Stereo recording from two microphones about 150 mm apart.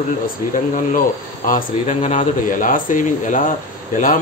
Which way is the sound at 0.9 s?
65° left (ahead or behind).